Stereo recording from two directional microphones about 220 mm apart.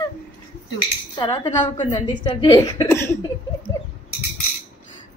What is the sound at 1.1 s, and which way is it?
Speech, 20° left (ahead or behind).